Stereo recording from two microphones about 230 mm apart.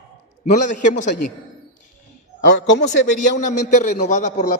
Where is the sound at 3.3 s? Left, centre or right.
Left.